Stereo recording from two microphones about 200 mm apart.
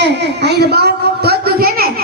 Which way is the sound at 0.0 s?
60° right (ahead or behind).